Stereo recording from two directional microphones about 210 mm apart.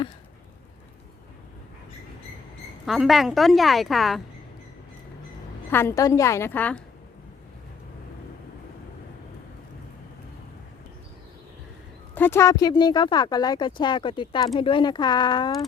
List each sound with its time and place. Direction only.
2.8 s a woman's voice: centre (ahead or behind)
5.7 s a woman's voice: 15° left (ahead or behind)
12.1 s speech: 10° left (ahead or behind)